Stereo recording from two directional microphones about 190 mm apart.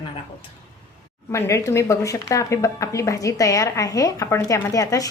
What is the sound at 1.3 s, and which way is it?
A woman's voice, 15° left (ahead or behind).